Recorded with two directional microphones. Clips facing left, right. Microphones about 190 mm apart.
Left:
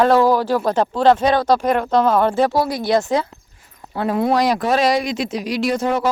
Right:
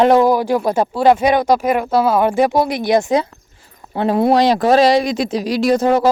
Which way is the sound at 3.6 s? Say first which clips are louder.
Right 4 dB; 30° right (ahead or behind).